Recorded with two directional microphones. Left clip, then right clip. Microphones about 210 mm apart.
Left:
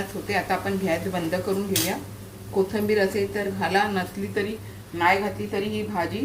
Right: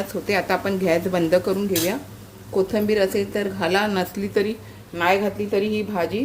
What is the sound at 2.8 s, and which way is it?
Speech, 50° right (ahead or behind).